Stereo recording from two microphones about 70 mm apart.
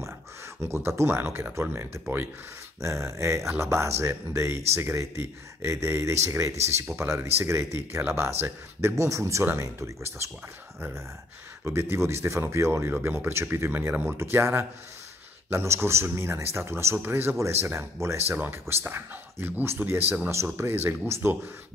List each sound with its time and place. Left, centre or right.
0.6 s speech: right
2.8 s speech: right
11.6 s speech: right
16.9 s speech: right